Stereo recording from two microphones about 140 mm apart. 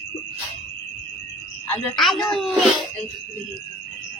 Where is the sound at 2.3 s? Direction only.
Centre (ahead or behind).